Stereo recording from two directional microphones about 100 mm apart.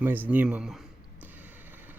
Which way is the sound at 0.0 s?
20° right (ahead or behind).